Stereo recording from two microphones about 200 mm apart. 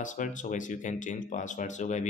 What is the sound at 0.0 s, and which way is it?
Speech, 40° left (ahead or behind).